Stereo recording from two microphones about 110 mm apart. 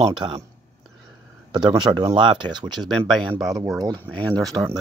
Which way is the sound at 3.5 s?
35° right (ahead or behind).